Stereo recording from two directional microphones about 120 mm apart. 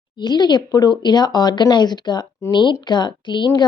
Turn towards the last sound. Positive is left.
turn(degrees=40)  # may be behind; listen again after turning